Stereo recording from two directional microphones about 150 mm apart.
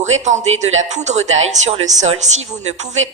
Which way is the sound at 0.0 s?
50° right (ahead or behind).